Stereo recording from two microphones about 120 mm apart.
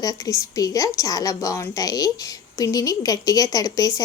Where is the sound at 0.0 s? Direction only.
30° left (ahead or behind).